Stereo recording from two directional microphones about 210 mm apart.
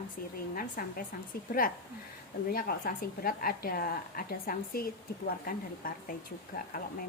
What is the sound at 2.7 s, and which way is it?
A woman's voice, 45° left (ahead or behind).